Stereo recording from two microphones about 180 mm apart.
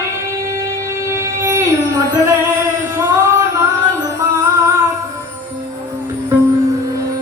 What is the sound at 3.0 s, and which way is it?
Music, 15° right (ahead or behind).